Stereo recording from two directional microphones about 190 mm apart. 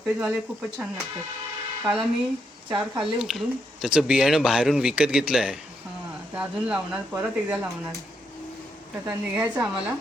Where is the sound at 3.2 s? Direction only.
Centre (ahead or behind).